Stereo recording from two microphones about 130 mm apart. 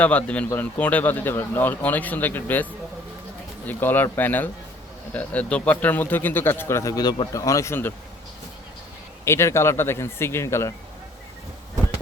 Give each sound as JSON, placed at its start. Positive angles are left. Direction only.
{"t": 0.0, "sound": "speech", "side_deg": 10}
{"t": 3.7, "sound": "speech", "side_deg": 15}
{"t": 9.2, "sound": "speech", "side_deg": 20}